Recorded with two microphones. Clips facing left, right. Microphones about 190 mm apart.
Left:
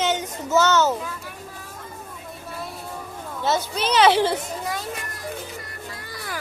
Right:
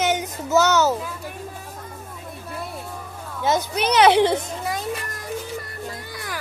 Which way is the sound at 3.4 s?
15° right (ahead or behind).